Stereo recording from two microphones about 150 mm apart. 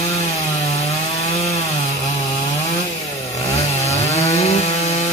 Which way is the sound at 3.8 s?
45° left (ahead or behind).